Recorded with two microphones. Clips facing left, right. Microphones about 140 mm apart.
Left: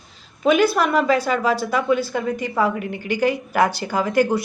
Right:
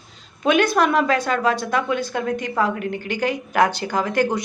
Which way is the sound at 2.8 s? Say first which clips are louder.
Right 2 dB; 50° right (ahead or behind).